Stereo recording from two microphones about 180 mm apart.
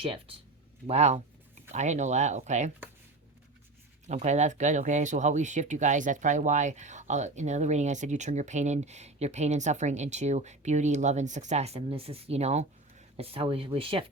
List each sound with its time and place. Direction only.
0.0 s speech: 30° right (ahead or behind)
4.0 s speech: 40° right (ahead or behind)